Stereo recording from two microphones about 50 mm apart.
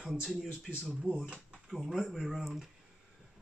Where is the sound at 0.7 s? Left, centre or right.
Centre.